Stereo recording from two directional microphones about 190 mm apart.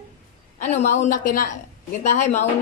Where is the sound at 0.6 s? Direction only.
40° left (ahead or behind).